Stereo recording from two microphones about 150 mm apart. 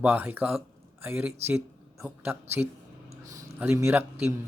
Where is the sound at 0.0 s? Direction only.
15° right (ahead or behind).